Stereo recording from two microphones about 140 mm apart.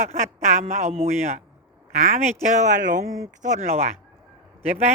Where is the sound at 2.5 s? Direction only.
60° right (ahead or behind).